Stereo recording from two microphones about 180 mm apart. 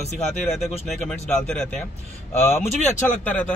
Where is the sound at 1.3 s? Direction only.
5° left (ahead or behind).